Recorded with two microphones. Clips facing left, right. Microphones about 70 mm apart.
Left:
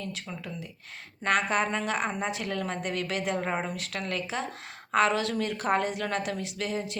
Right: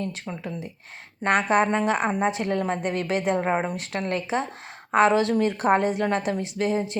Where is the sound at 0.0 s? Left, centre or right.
Right.